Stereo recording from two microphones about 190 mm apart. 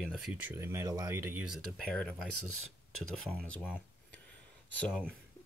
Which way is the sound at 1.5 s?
Centre (ahead or behind).